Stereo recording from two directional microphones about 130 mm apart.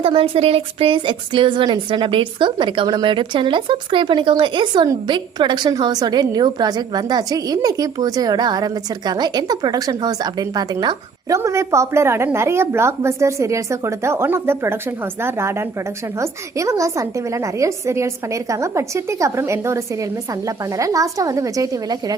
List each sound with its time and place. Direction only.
0.0 s a woman's voice: 45° right (ahead or behind); by 22.2 s 30° right (ahead or behind)